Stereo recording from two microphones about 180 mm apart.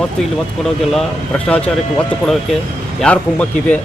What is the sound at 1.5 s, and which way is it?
A man's voice, 5° left (ahead or behind).